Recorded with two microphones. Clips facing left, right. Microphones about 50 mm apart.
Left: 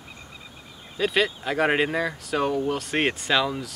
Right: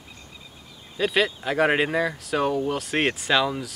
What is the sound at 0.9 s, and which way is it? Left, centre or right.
Speech, centre.